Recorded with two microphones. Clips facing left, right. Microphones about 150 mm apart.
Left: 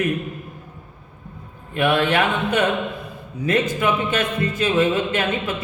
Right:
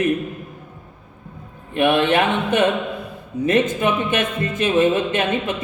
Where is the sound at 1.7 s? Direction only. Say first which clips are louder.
Right 2 dB; 20° right (ahead or behind).